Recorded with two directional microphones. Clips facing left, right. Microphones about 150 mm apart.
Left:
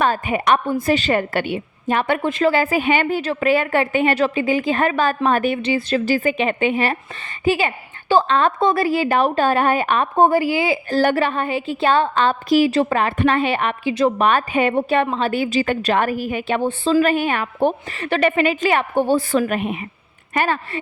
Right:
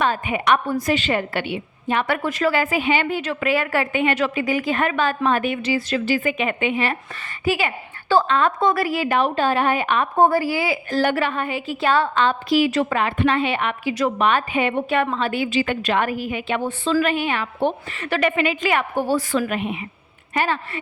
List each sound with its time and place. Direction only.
0.0 s a woman's voice: 40° left (ahead or behind)
2.0 s a woman's voice: 25° left (ahead or behind)
2.8 s a woman's voice: 50° left (ahead or behind)
10.2 s a woman's voice: 20° left (ahead or behind)
10.8 s a woman's voice: 35° left (ahead or behind)
13.8 s a woman's voice: 25° left (ahead or behind)
14.2 s a woman's voice: 45° left (ahead or behind); by 19.4 s 25° left (ahead or behind)
19.4 s a woman's voice: 45° left (ahead or behind)